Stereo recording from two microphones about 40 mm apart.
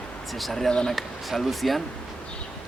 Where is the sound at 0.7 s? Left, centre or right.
Centre.